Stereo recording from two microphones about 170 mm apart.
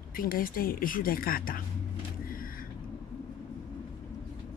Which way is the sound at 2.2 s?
55° left (ahead or behind).